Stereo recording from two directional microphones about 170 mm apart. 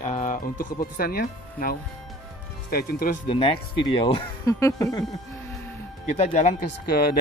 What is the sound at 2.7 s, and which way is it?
Speech, 60° left (ahead or behind).